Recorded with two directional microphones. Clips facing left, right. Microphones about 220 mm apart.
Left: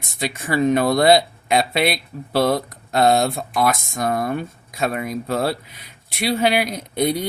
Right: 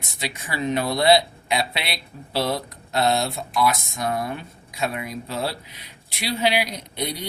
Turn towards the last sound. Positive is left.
turn(degrees=50)  # may be behind; listen again after turning